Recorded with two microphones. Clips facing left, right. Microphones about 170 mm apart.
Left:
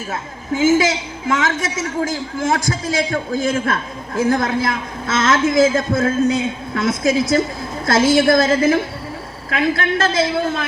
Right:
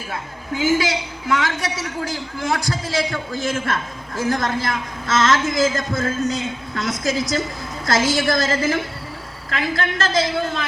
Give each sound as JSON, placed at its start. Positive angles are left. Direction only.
{"t": 0.1, "sound": "a woman's voice", "side_deg": 45}